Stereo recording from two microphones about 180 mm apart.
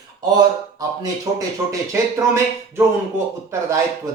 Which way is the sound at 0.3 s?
20° right (ahead or behind).